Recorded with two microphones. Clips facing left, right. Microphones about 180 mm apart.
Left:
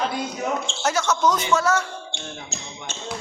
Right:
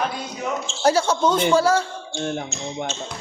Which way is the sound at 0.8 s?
30° right (ahead or behind).